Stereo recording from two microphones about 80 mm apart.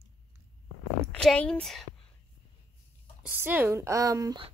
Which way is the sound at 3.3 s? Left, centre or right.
Right.